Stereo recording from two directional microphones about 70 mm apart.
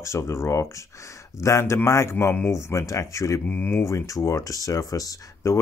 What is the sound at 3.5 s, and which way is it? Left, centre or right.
Speech, left.